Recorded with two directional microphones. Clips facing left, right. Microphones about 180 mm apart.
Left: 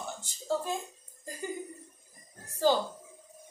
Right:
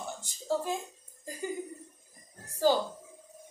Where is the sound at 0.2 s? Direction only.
15° right (ahead or behind).